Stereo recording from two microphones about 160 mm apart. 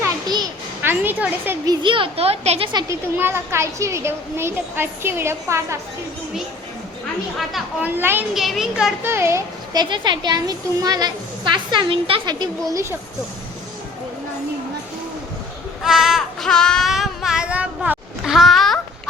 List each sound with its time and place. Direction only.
0.0 s children playing: 25° right (ahead or behind)
0.8 s a woman's voice: 10° right (ahead or behind)
1.6 s a child's voice: 25° right (ahead or behind)
2.7 s speech: 15° right (ahead or behind)
7.3 s a child's voice: centre (ahead or behind)
7.9 s speech: 15° right (ahead or behind)
8.3 s a child's voice: centre (ahead or behind)
9.0 s speech: 15° right (ahead or behind)
9.9 s speech: 30° right (ahead or behind)
15.8 s child singing: centre (ahead or behind)